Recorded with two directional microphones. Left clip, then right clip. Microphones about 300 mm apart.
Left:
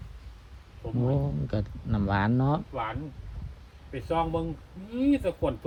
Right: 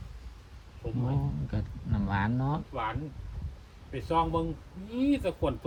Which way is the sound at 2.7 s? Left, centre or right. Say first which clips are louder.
Left 1 dB; centre.